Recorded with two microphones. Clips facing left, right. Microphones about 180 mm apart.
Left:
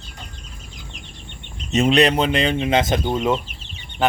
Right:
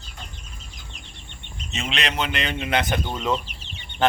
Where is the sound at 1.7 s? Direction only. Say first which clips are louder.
Left 13 dB; 40° left (ahead or behind); by 3.2 s 20° left (ahead or behind).